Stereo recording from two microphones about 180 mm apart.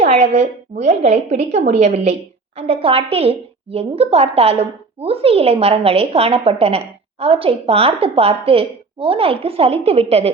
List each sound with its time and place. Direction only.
0.0 s a woman's voice: 35° right (ahead or behind)